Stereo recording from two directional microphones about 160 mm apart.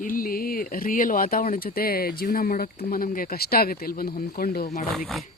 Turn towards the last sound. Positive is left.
turn(degrees=0)  # may be behind; listen again after turning